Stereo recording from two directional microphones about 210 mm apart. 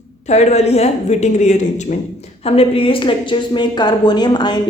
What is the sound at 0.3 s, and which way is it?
A woman's voice, 30° left (ahead or behind).